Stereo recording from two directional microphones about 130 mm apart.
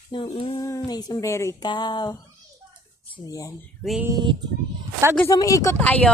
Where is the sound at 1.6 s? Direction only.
35° left (ahead or behind).